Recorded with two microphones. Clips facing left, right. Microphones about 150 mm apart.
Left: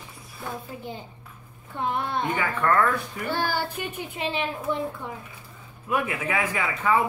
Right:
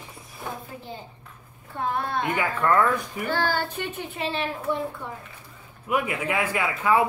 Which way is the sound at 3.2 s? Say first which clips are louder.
Right 2 dB; 15° left (ahead or behind).